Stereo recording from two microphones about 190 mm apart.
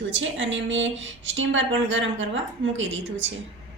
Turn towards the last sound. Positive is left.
turn(degrees=-80)